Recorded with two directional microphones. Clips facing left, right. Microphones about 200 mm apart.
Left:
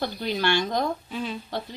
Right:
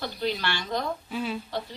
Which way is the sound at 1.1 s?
5° right (ahead or behind).